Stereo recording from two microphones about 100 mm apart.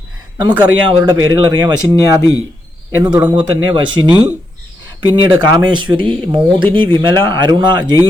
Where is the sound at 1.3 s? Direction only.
40° right (ahead or behind).